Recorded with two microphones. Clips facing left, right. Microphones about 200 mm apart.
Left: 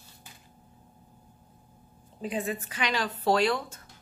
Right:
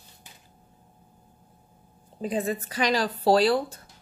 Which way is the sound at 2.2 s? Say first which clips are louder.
Right 4 dB; 35° right (ahead or behind).